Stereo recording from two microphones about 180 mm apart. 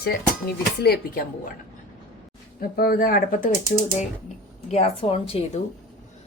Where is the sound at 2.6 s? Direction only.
55° left (ahead or behind).